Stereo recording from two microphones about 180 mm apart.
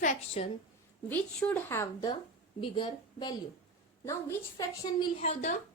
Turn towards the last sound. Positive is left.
turn(degrees=40)  # may be behind; listen again after turning